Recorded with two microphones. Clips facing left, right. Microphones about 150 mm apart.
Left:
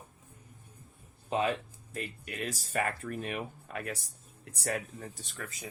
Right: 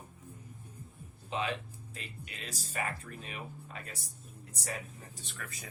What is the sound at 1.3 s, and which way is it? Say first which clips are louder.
Speech: left 5 dB; 45° left (ahead or behind).